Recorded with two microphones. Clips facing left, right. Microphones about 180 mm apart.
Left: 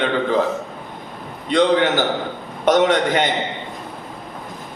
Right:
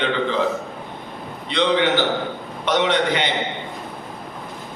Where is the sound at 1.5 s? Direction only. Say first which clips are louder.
Left 3 dB; 45° left (ahead or behind).